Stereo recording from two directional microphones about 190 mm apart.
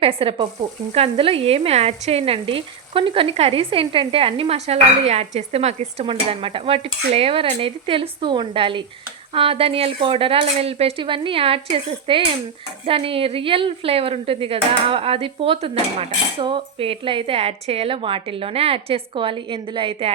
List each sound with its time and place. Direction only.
0.0 s speech: 30° right (ahead or behind)